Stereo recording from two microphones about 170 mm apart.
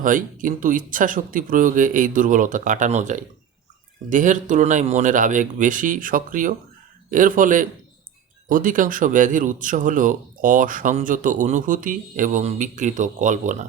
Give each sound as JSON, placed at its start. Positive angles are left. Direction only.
{"t": 0.0, "sound": "speech", "side_deg": -50}